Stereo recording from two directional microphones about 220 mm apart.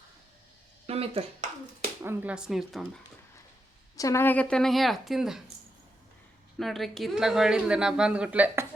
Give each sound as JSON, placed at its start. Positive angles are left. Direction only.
{"t": 0.9, "sound": "speech", "side_deg": -25}
{"t": 2.0, "sound": "a woman's voice", "side_deg": -10}
{"t": 3.9, "sound": "a woman's voice", "side_deg": 15}
{"t": 6.6, "sound": "a woman's voice", "side_deg": 0}